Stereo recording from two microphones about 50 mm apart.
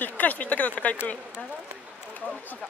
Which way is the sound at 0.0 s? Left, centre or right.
Left.